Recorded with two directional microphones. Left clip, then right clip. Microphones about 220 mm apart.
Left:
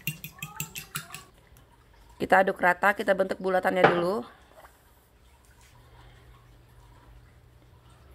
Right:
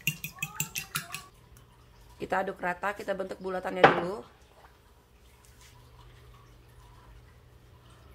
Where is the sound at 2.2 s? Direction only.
35° left (ahead or behind).